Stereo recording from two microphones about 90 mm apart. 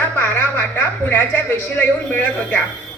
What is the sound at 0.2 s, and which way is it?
A man's voice, 20° left (ahead or behind).